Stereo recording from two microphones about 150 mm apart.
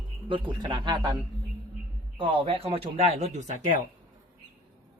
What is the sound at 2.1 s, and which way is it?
Speech, 40° right (ahead or behind).